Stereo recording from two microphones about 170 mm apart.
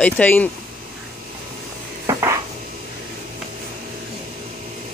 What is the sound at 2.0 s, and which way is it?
Dishes, 15° right (ahead or behind).